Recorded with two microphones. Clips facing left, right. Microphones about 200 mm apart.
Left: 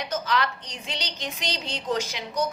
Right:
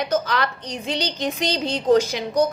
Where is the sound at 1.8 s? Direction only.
50° right (ahead or behind).